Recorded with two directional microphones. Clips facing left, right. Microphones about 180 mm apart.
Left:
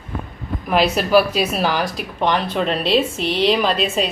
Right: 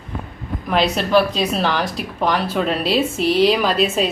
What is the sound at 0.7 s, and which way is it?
Speech, 5° left (ahead or behind).